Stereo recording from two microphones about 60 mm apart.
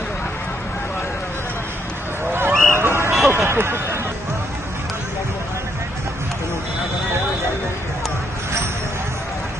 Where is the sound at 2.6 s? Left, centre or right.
Right.